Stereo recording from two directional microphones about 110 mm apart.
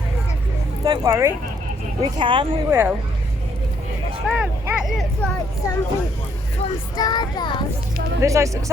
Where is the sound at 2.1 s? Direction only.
50° right (ahead or behind).